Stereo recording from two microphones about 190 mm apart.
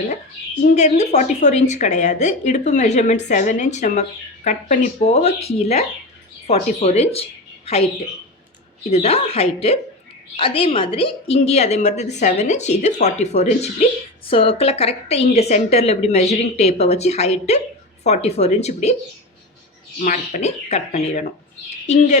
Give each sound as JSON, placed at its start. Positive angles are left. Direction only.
{"t": 0.7, "sound": "a woman's voice", "side_deg": 35}
{"t": 8.9, "sound": "a woman's voice", "side_deg": 35}
{"t": 20.0, "sound": "a woman's voice", "side_deg": 40}